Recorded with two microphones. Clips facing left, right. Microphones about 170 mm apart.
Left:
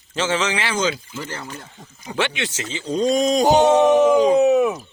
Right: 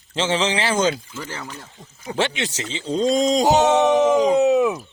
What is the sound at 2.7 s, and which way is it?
Speech, 25° right (ahead or behind).